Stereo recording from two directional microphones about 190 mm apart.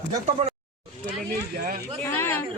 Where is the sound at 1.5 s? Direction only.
50° right (ahead or behind).